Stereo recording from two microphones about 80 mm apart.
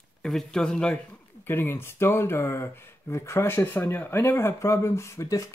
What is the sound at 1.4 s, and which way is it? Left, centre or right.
Speech, left.